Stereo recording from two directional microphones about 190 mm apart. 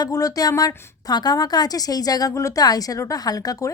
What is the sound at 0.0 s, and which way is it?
A woman's voice, 15° left (ahead or behind).